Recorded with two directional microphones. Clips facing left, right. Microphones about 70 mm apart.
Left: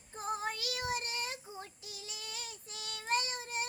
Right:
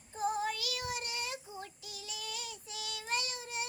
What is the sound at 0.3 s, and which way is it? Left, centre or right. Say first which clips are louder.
Child singing: right 2 dB; left.